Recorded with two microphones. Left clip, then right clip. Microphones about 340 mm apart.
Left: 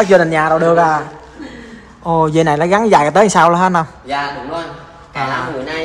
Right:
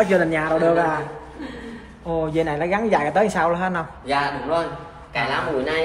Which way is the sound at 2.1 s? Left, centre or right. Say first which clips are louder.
Left 10 dB; centre.